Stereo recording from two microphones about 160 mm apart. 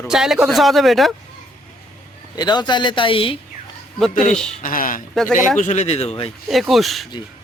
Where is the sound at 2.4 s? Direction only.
25° left (ahead or behind).